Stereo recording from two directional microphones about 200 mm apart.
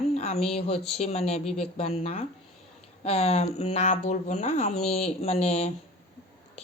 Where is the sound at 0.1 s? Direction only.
30° left (ahead or behind).